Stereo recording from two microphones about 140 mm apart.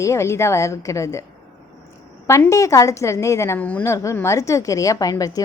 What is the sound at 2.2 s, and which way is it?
A woman's voice, 20° left (ahead or behind).